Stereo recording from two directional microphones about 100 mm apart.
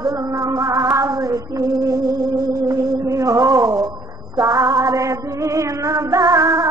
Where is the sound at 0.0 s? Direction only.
30° right (ahead or behind).